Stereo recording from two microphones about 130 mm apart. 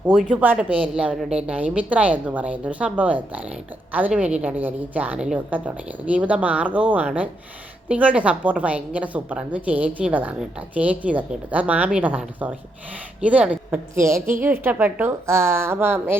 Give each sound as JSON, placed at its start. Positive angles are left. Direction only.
{"t": 0.3, "sound": "a woman's voice", "side_deg": -10}